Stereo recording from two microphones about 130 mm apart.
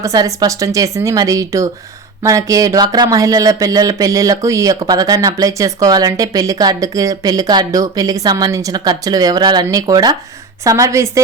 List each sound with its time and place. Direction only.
0.0 s speech: 25° right (ahead or behind)